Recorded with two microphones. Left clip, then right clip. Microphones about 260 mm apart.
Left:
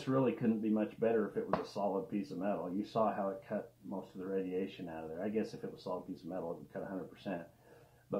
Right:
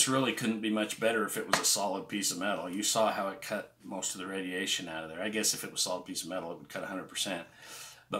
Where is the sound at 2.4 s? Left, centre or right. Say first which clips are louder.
Right 4 dB; right.